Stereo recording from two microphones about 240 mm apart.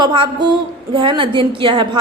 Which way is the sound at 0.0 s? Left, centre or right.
Centre.